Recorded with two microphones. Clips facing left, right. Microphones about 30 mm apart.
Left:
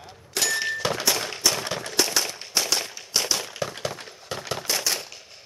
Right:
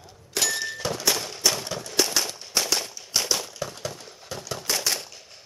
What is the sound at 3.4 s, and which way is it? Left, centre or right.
Breaking, left.